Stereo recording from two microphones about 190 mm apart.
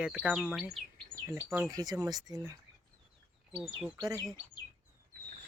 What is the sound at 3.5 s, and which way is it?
Speech, 5° right (ahead or behind).